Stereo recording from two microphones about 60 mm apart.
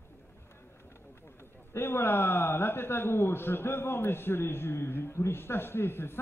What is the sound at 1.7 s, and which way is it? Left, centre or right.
A man's voice, left.